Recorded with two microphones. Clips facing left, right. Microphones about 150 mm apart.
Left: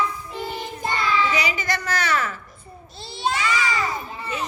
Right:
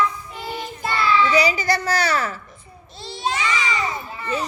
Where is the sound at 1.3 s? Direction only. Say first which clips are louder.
Right 6 dB; 35° right (ahead or behind).